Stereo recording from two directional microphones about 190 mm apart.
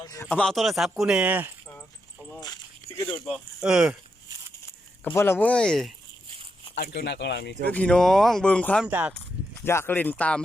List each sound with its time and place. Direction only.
0.0 s speech: 15° left (ahead or behind); by 1.5 s 10° right (ahead or behind)
2.8 s a sound: 30° right (ahead or behind)
3.2 s speech: 5° right (ahead or behind)
5.0 s speech: 10° left (ahead or behind)
6.7 s speech: 60° left (ahead or behind)
7.7 s speech: 5° left (ahead or behind)
8.9 s speech: 10° right (ahead or behind)
9.6 s speech: 10° left (ahead or behind)